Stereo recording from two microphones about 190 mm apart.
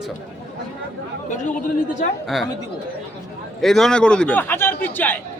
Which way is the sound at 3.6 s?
Centre (ahead or behind).